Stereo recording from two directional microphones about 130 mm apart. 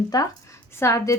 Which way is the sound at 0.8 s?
25° left (ahead or behind).